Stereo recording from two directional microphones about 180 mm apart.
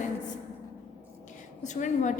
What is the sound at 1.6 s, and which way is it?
Speech, 40° left (ahead or behind).